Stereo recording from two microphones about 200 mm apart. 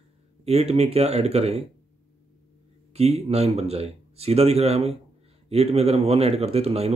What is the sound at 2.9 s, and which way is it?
Speech, 30° right (ahead or behind).